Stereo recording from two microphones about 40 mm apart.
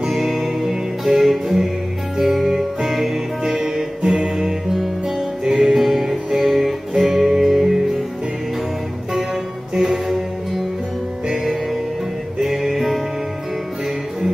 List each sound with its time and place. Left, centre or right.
0.2 s music: centre
4.5 s music: centre
5.4 s music: right
5.7 s music: centre
9.8 s music: centre
12.4 s music: centre